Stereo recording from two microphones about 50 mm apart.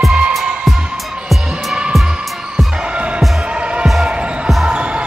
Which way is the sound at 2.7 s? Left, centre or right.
Right.